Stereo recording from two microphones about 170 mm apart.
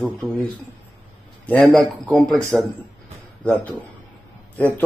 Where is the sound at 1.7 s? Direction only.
5° left (ahead or behind).